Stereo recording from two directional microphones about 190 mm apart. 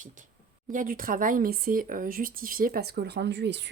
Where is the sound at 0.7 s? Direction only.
45° right (ahead or behind).